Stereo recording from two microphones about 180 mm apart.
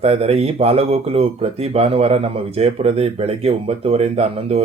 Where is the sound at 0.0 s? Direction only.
35° right (ahead or behind).